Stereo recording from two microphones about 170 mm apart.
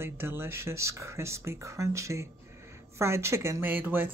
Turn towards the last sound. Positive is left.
turn(degrees=-10)  # may be behind; listen again after turning